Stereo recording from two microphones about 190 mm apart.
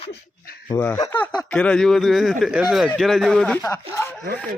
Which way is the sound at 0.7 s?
10° left (ahead or behind).